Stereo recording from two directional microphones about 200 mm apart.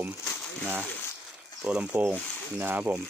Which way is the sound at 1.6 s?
5° right (ahead or behind).